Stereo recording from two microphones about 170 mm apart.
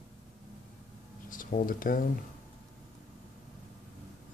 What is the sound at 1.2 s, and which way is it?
Speech, 55° left (ahead or behind).